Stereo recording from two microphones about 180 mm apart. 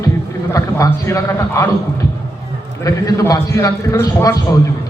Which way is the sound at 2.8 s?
20° left (ahead or behind).